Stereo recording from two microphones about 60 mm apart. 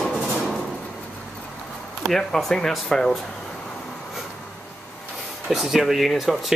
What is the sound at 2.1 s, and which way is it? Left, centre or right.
Speech, centre.